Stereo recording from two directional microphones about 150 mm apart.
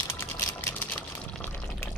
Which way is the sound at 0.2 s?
15° left (ahead or behind).